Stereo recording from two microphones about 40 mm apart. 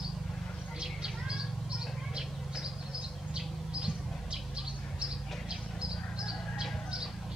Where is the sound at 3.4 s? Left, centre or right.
Centre.